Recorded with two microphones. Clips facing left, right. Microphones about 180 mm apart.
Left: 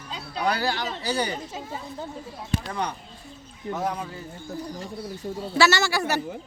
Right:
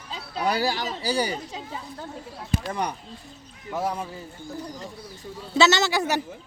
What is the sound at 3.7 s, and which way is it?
Speech, 5° right (ahead or behind).